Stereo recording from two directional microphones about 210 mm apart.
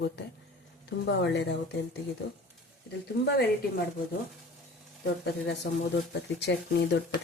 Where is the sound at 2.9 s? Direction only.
50° left (ahead or behind).